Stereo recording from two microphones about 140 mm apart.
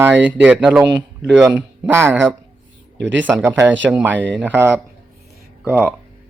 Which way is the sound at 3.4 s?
20° right (ahead or behind).